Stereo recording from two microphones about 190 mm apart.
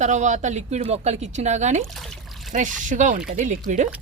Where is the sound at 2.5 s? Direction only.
40° right (ahead or behind).